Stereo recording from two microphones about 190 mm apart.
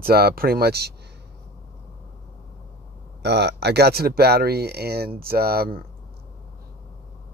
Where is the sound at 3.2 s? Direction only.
60° right (ahead or behind).